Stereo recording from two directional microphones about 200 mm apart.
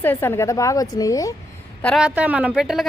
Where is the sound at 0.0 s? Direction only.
10° left (ahead or behind).